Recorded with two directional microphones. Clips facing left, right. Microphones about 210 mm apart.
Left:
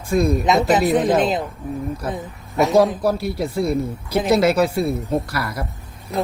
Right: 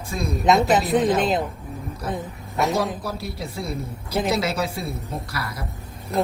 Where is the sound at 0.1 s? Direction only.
55° left (ahead or behind).